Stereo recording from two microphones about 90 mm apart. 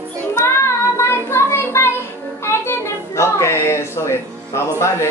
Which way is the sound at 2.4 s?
30° left (ahead or behind).